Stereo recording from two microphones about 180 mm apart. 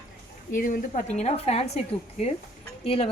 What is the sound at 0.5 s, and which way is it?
A woman's voice, 50° left (ahead or behind).